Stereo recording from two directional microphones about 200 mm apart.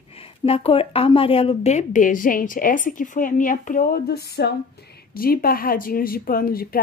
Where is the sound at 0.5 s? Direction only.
30° left (ahead or behind).